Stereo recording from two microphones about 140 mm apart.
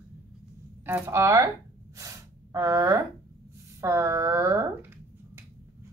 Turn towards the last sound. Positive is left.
turn(degrees=-20)  # may be behind; listen again after turning